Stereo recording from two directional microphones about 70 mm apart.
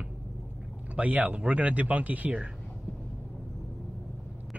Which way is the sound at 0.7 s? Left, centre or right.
Right.